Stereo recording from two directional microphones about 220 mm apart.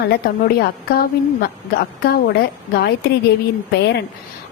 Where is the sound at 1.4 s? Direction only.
45° left (ahead or behind).